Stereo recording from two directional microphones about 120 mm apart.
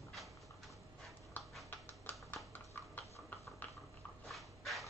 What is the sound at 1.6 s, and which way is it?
Typing, 15° left (ahead or behind).